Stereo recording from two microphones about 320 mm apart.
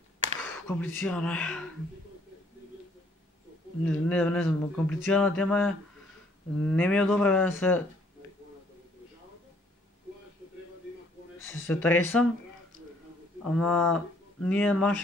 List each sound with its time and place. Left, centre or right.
0.4 s speech: centre
3.8 s speech: centre
11.4 s speech: centre
12.7 s a sound: right
13.4 s speech: centre